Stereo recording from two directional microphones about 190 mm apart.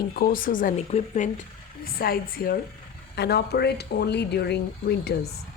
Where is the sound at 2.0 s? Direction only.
50° left (ahead or behind).